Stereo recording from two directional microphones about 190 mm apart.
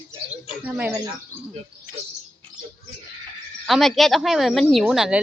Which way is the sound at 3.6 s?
Centre (ahead or behind).